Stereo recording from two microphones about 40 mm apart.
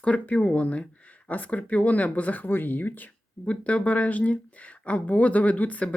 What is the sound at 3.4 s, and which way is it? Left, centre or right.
Speech, left.